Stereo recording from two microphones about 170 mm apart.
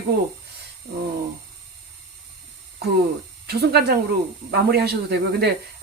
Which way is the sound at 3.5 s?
70° right (ahead or behind).